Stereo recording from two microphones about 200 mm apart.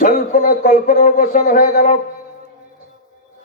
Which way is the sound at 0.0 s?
45° left (ahead or behind).